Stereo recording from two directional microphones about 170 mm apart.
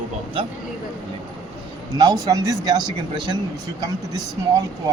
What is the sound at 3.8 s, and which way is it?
Speech, 25° right (ahead or behind).